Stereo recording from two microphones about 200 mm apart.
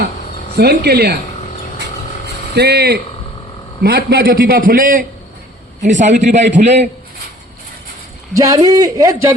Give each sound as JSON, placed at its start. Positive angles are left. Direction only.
{"t": 0.5, "sound": "a man's voice", "side_deg": -55}
{"t": 2.6, "sound": "a man's voice", "side_deg": -55}
{"t": 8.3, "sound": "a man's voice", "side_deg": -15}